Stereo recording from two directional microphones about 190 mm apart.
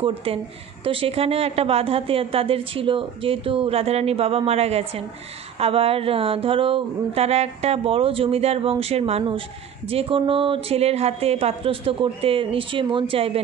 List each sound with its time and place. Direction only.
0.0 s a woman's voice: 30° right (ahead or behind)